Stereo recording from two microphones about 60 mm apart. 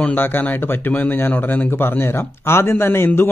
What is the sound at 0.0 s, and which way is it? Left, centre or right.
A man's voice, left.